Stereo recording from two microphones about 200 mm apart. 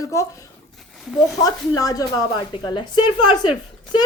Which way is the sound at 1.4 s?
15° left (ahead or behind).